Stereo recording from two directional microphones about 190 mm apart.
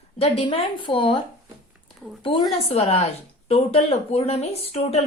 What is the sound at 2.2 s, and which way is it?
A woman's voice, 25° left (ahead or behind).